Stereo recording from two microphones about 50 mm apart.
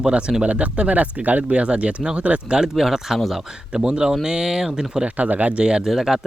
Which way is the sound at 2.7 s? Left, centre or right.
Centre.